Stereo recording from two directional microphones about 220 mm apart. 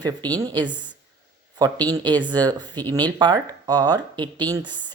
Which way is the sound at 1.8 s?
20° right (ahead or behind).